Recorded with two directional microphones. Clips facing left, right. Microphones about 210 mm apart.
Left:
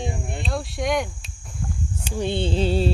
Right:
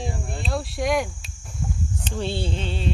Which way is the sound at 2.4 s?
35° left (ahead or behind).